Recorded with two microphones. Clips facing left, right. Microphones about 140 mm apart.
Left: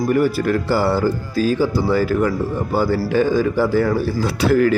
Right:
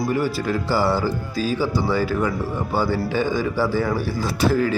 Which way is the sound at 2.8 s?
45° left (ahead or behind).